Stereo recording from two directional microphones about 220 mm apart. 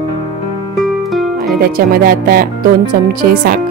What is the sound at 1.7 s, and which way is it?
Speech, 40° right (ahead or behind).